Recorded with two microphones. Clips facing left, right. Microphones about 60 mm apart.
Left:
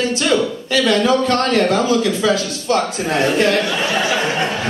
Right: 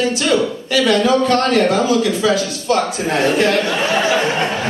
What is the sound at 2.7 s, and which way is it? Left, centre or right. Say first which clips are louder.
Speech: right 1 dB; right.